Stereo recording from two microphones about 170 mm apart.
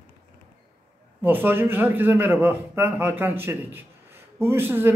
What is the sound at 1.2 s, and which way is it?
A man's voice, 10° right (ahead or behind).